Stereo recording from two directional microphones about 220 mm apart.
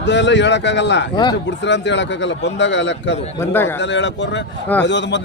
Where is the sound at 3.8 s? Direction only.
55° left (ahead or behind).